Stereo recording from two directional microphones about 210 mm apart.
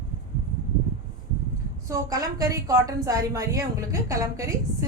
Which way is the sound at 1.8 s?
15° right (ahead or behind).